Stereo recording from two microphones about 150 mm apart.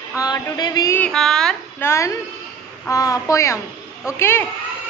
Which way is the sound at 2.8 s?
20° left (ahead or behind).